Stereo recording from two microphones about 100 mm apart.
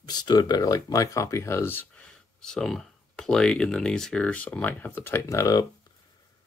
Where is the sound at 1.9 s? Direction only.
10° left (ahead or behind); by 5.7 s 35° left (ahead or behind).